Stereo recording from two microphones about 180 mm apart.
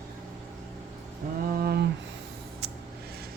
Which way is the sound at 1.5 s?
55° right (ahead or behind).